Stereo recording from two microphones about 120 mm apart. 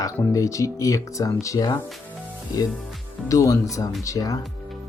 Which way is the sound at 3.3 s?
25° left (ahead or behind).